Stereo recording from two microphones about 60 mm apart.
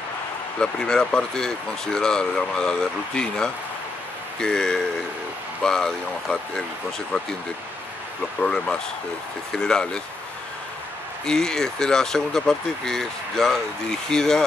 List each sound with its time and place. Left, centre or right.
0.6 s speech: centre
8.4 s speech: centre
11.2 s speech: centre